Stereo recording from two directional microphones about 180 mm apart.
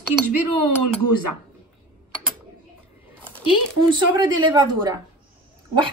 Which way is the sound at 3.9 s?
25° right (ahead or behind).